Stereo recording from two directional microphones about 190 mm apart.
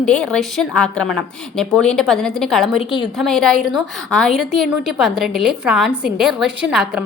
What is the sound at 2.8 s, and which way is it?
Speech, 30° left (ahead or behind).